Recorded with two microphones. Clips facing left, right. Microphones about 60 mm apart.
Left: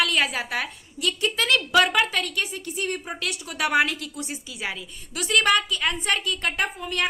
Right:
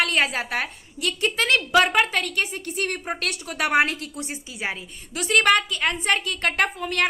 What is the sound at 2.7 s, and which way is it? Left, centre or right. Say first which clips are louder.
Speech: right 1 dB; right.